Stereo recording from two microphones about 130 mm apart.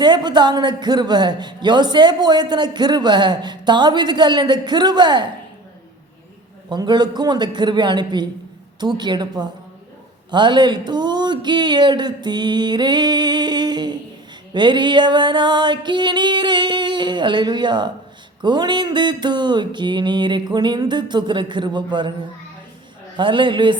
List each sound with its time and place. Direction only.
0.0 s speech: 35° right (ahead or behind)
6.7 s speech: 35° right (ahead or behind)
23.1 s speech: 40° right (ahead or behind)